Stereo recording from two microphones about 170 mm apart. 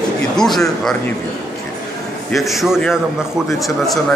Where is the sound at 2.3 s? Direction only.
Centre (ahead or behind).